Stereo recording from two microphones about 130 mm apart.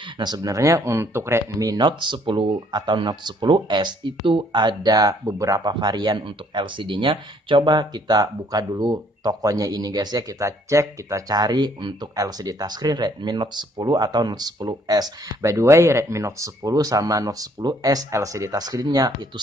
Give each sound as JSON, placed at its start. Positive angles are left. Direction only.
{"t": 0.0, "sound": "speech", "side_deg": -30}